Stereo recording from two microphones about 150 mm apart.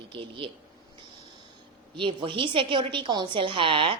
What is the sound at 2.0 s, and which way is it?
A woman's voice, 35° right (ahead or behind).